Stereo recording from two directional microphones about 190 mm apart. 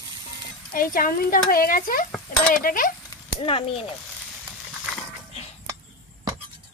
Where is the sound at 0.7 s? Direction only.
50° left (ahead or behind).